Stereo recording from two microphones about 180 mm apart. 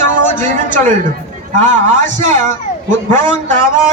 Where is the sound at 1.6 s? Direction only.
45° right (ahead or behind).